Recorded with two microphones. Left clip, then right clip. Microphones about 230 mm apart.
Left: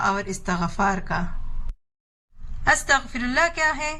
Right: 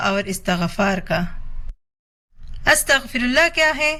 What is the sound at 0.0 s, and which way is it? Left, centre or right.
A man's voice, right.